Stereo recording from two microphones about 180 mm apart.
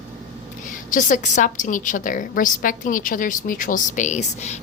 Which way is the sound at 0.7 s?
45° left (ahead or behind).